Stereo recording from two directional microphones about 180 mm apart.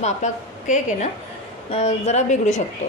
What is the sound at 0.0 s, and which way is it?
A woman's voice, 40° left (ahead or behind).